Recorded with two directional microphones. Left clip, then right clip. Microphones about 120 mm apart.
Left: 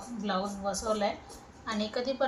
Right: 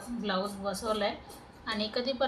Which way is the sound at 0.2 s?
5° right (ahead or behind).